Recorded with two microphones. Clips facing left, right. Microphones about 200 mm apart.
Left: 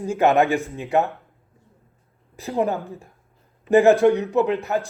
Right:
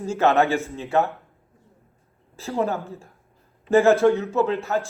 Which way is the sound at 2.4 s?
15° left (ahead or behind).